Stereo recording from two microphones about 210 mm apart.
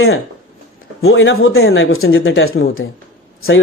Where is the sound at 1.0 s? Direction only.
65° left (ahead or behind).